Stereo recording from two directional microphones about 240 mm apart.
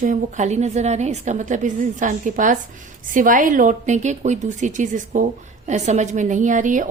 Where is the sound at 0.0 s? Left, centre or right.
Right.